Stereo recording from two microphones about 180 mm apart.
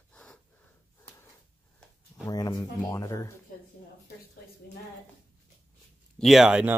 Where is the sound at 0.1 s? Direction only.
5° left (ahead or behind).